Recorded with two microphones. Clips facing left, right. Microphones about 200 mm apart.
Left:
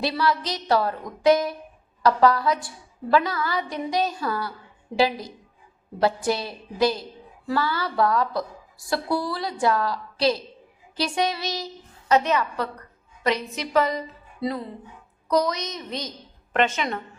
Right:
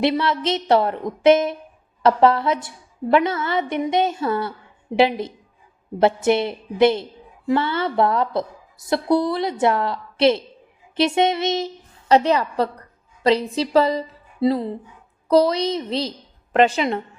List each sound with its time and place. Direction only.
0.0 s a woman's voice: 25° right (ahead or behind)